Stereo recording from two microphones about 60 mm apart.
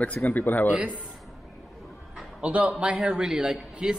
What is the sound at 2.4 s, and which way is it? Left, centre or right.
A man's voice, centre.